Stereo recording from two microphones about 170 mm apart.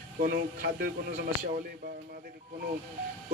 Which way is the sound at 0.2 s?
60° right (ahead or behind).